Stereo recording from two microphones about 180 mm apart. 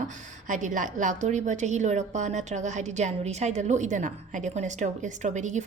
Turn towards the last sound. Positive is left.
turn(degrees=-40)  # may be behind; listen again after turning